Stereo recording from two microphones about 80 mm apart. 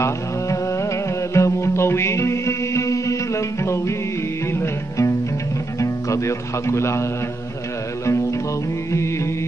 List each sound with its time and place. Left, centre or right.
1.3 s music: left
5.8 s speech: left
8.9 s music: left